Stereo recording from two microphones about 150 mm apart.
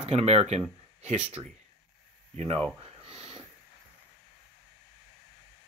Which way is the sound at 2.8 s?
40° right (ahead or behind).